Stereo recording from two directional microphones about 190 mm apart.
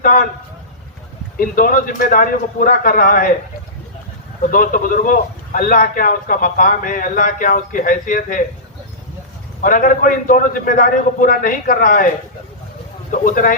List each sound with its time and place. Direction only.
0.0 s a man's voice: 45° left (ahead or behind)
1.4 s a man's voice: 45° left (ahead or behind)
4.4 s a man's voice: 45° left (ahead or behind)
9.6 s a man's voice: 45° left (ahead or behind)